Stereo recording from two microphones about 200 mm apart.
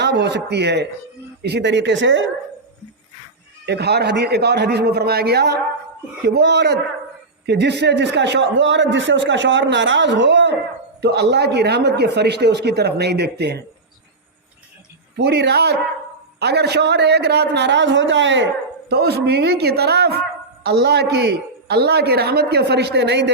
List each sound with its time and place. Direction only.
0.0 s a man's voice: 60° right (ahead or behind)
3.7 s a man's voice: 55° right (ahead or behind)
15.1 s a man's voice: 55° right (ahead or behind)
18.9 s a man's voice: 55° right (ahead or behind)